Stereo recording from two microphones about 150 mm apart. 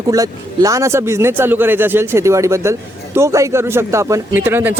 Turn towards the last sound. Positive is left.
turn(degrees=-15)  # may be behind; listen again after turning